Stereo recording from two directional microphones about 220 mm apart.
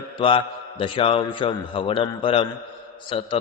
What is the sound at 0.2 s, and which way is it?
A man's voice, 25° left (ahead or behind).